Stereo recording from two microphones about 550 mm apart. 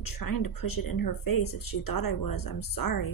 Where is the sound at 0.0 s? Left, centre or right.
Left.